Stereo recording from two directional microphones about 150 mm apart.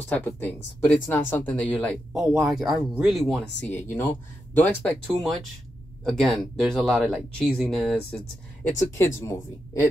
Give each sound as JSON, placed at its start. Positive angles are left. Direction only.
{"t": 0.0, "sound": "speech", "side_deg": 10}
{"t": 2.2, "sound": "speech", "side_deg": -5}
{"t": 8.6, "sound": "speech", "side_deg": 15}